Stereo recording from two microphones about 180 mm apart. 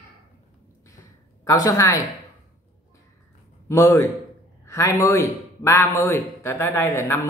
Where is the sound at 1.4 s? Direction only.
20° left (ahead or behind).